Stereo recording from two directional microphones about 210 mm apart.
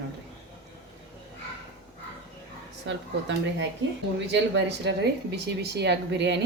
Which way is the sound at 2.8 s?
60° right (ahead or behind).